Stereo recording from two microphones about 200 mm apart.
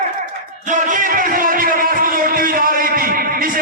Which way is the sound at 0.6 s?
40° right (ahead or behind).